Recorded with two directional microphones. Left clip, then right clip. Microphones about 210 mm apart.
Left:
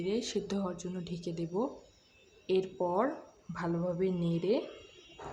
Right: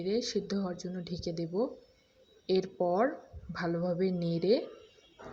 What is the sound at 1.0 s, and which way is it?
Speech, 5° left (ahead or behind).